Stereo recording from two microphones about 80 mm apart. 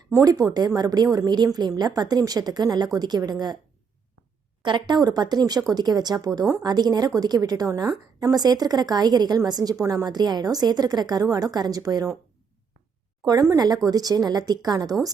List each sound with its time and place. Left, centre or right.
0.3 s a woman's voice: right
4.6 s speech: right
7.9 s a woman's voice: right
8.4 s a woman's voice: right
10.1 s speech: right
13.2 s a woman's voice: right